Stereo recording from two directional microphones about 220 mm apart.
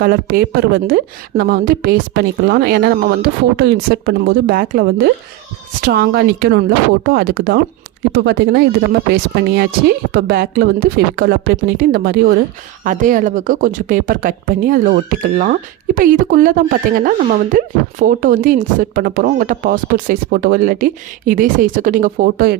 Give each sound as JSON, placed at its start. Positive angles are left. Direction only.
{"t": 0.0, "sound": "a woman's voice", "side_deg": -45}
{"t": 8.1, "sound": "a woman's voice", "side_deg": -55}